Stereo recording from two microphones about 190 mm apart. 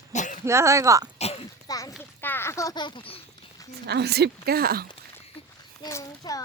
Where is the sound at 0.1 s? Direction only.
40° left (ahead or behind).